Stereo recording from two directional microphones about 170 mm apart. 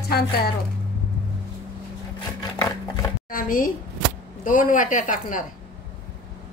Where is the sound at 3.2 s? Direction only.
55° left (ahead or behind).